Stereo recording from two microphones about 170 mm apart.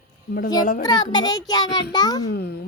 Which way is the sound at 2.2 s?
70° left (ahead or behind).